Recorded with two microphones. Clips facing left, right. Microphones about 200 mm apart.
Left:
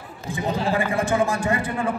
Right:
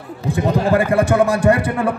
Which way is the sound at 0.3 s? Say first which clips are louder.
Right 7 dB; 65° right (ahead or behind).